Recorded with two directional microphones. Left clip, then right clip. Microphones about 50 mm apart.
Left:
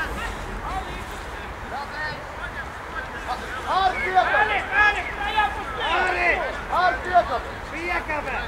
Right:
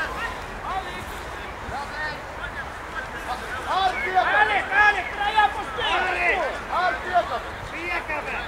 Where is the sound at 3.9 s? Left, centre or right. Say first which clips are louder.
Left 2 dB; left.